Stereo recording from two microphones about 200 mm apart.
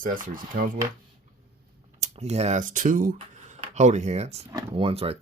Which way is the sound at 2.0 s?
30° right (ahead or behind).